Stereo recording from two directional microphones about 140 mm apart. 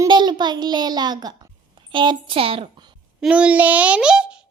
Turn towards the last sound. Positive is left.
turn(degrees=-5)  # may be behind; listen again after turning